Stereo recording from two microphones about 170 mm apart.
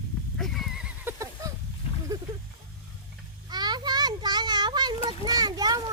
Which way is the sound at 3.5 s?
25° right (ahead or behind).